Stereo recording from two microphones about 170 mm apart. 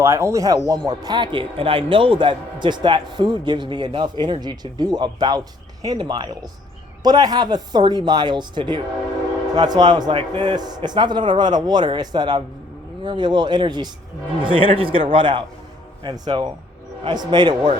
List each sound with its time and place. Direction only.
0.0 s speech: 15° right (ahead or behind)